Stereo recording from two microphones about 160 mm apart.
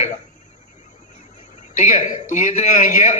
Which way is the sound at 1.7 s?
50° left (ahead or behind).